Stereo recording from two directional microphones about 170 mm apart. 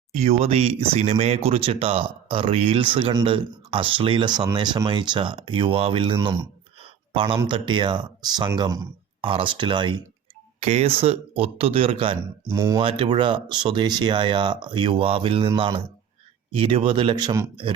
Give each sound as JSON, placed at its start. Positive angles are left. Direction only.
{"t": 0.1, "sound": "speech", "side_deg": -40}
{"t": 10.6, "sound": "speech", "side_deg": -40}